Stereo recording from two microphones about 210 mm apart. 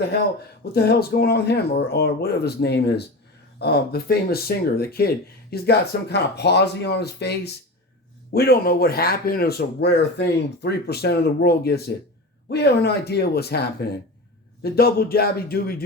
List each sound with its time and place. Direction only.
0.6 s speech: 50° left (ahead or behind)